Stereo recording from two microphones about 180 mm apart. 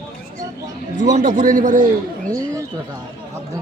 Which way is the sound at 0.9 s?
45° right (ahead or behind).